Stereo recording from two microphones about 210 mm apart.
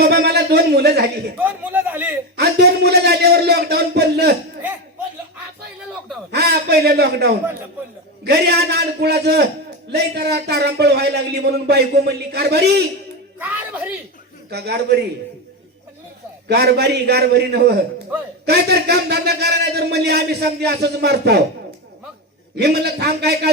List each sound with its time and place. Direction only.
0.0 s a man's voice: 50° right (ahead or behind)
1.4 s a man's voice: 10° right (ahead or behind)
2.4 s a sound: 50° right (ahead or behind)
6.3 s a sound: 50° right (ahead or behind)
8.2 s a man's voice: 50° right (ahead or behind)
13.4 s speech: 5° right (ahead or behind)
14.5 s a man's voice: 50° right (ahead or behind)
16.5 s a man's voice: 50° right (ahead or behind)
22.5 s a man's voice: 50° right (ahead or behind)